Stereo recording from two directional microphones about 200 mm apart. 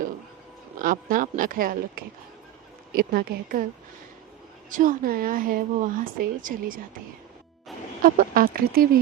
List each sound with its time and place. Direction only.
0.8 s speech: 45° right (ahead or behind)
3.1 s speech: 50° right (ahead or behind)
4.7 s speech: 45° right (ahead or behind)
7.7 s music: centre (ahead or behind)
8.0 s speech: 45° right (ahead or behind)